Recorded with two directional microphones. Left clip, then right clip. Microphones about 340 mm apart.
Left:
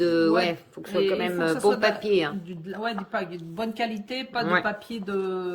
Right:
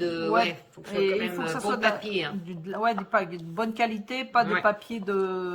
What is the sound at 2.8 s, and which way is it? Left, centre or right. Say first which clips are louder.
Speech: right 4 dB; centre.